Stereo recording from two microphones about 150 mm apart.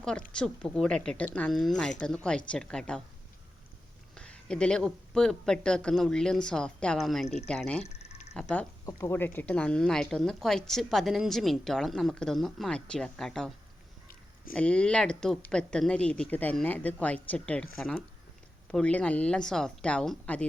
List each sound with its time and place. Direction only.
0.0 s speech: 5° left (ahead or behind)
4.1 s speech: 5° left (ahead or behind)
7.9 s a sound: 45° left (ahead or behind)
8.3 s speech: 5° left (ahead or behind)
8.9 s speech: 15° left (ahead or behind)
14.5 s speech: 5° left (ahead or behind)